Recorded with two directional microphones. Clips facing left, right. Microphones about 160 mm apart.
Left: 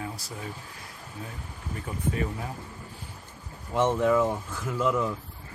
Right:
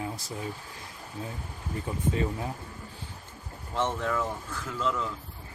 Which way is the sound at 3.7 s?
15° left (ahead or behind).